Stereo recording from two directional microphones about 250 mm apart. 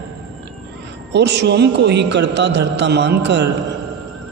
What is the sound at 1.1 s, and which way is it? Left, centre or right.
A man's voice, right.